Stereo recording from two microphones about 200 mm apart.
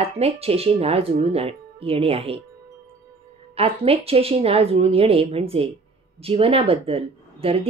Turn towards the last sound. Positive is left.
turn(degrees=-30)  # may be behind; listen again after turning